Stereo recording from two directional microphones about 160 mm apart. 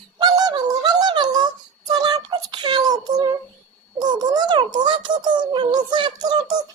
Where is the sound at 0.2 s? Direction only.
25° right (ahead or behind).